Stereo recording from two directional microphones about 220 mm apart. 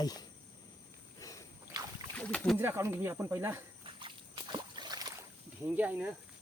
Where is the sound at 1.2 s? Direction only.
15° left (ahead or behind).